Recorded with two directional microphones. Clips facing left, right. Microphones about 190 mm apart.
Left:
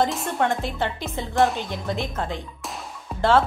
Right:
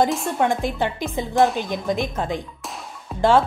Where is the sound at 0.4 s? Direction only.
15° right (ahead or behind).